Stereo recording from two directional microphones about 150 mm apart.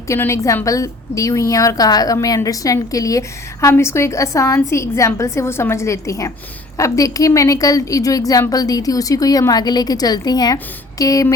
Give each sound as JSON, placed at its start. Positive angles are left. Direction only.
{"t": 0.1, "sound": "a woman's voice", "side_deg": 20}